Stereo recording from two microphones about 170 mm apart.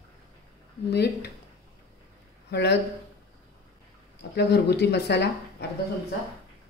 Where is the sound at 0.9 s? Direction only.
75° left (ahead or behind).